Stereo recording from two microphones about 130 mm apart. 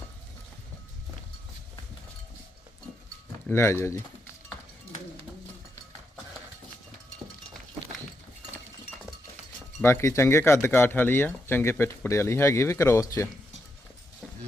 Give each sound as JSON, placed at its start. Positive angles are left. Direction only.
{"t": 3.5, "sound": "speech", "side_deg": 20}
{"t": 9.8, "sound": "speech", "side_deg": 20}